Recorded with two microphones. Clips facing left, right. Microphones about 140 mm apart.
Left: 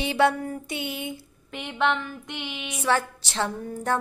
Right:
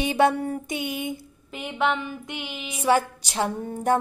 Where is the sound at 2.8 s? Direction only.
15° right (ahead or behind).